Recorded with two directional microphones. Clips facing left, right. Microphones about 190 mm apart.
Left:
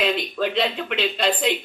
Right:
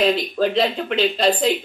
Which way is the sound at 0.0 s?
35° right (ahead or behind).